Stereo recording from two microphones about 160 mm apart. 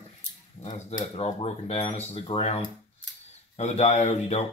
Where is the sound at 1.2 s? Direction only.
40° left (ahead or behind).